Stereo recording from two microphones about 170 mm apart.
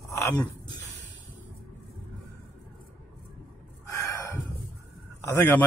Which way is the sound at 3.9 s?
15° left (ahead or behind).